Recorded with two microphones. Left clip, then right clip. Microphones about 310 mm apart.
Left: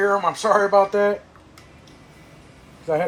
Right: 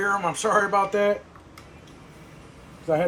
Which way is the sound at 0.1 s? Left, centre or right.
Centre.